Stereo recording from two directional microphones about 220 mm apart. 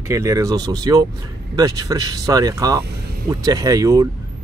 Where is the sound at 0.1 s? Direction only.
15° right (ahead or behind).